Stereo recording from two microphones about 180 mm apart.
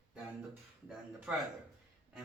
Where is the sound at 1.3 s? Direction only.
5° right (ahead or behind).